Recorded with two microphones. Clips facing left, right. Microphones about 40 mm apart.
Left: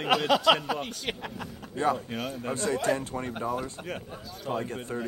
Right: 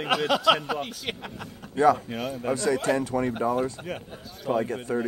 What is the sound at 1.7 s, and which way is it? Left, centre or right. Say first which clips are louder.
Speech: right 7 dB; right.